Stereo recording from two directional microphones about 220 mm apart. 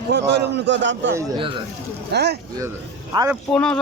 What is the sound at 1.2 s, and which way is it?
Speech, 20° right (ahead or behind).